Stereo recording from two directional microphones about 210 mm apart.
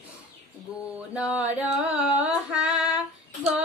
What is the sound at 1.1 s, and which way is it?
Music, 5° right (ahead or behind).